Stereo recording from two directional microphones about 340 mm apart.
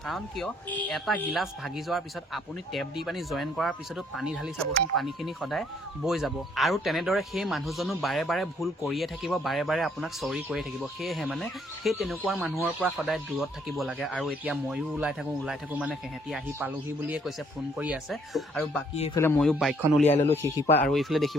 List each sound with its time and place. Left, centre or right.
0.0 s speech: centre
18.9 s speech: centre
20.1 s speech: centre
20.4 s speech: centre